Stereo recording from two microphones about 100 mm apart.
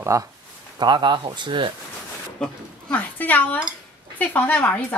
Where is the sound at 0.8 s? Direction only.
50° right (ahead or behind).